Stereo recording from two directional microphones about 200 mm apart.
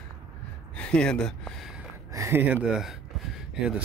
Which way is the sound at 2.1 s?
15° right (ahead or behind).